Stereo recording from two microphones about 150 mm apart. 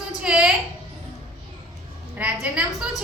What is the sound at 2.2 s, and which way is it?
Speech, 5° right (ahead or behind).